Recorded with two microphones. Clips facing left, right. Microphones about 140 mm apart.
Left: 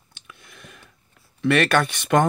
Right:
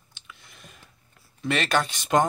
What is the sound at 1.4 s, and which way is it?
Speech, 60° left (ahead or behind).